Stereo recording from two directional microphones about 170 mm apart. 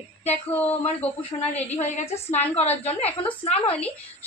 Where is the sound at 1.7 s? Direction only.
40° left (ahead or behind).